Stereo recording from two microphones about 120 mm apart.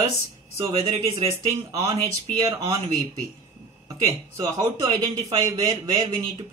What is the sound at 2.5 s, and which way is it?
Speech, 35° right (ahead or behind).